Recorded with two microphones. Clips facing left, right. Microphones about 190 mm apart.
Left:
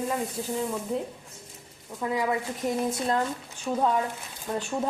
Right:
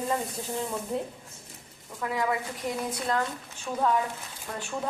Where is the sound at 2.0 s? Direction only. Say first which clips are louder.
Left 2 dB; 15° left (ahead or behind).